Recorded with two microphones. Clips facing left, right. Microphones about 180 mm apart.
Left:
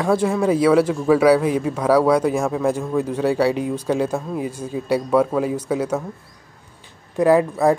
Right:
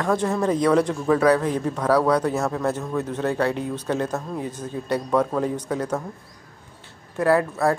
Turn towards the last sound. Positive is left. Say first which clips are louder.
# left 4 dB
turn(degrees=15)  # may be behind; listen again after turning